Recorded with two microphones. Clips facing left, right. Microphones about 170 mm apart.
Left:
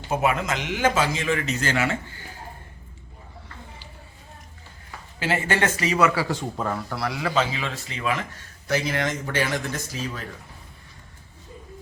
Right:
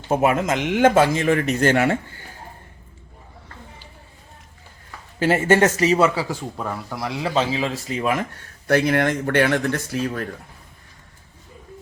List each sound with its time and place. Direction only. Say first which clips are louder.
0.1 s speech: right 5 dB; 45° right (ahead or behind)
5.2 s speech: right 7 dB; 45° right (ahead or behind)
6.6 s speech: left 1 dB; 10° right (ahead or behind); by 8.2 s 45° right (ahead or behind)
8.6 s speech: right 7 dB; 60° right (ahead or behind)